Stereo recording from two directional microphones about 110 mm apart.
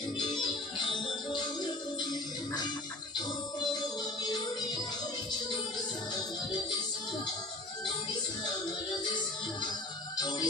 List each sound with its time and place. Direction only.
0.2 s music: 45° left (ahead or behind)
3.2 s music: 40° left (ahead or behind)
6.1 s music: 40° left (ahead or behind)
9.1 s music: 40° left (ahead or behind)